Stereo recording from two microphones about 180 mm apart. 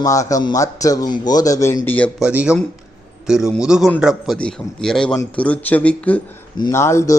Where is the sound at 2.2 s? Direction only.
5° right (ahead or behind).